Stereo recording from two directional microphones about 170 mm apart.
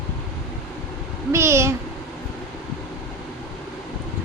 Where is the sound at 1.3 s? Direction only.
15° right (ahead or behind).